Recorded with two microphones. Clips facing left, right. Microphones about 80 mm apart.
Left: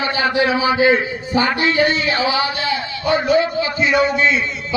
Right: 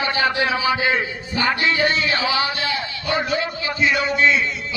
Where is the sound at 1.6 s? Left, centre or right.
Left.